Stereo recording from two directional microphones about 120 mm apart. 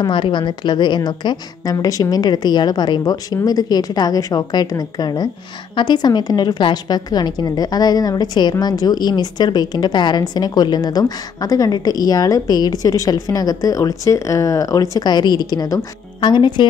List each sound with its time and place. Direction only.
0.0 s a woman's voice: 40° left (ahead or behind)